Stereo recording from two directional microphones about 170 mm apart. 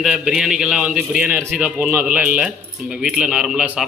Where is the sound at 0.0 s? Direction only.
5° right (ahead or behind).